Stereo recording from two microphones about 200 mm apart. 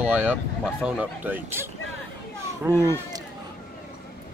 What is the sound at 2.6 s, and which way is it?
Speech, 15° right (ahead or behind).